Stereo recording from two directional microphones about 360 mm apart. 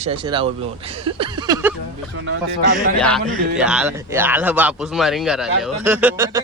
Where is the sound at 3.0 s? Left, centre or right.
Centre.